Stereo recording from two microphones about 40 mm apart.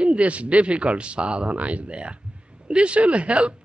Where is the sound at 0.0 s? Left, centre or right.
Right.